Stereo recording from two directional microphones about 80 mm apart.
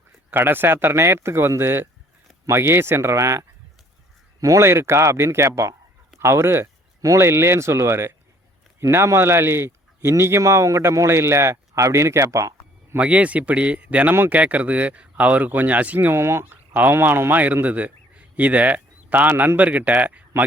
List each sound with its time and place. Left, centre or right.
0.3 s speech: right
13.0 s speech: centre